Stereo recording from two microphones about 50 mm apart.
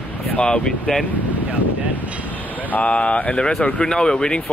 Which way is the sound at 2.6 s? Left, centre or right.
Left.